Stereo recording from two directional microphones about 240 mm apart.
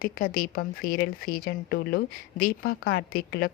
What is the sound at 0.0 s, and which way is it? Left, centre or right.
Speech, left.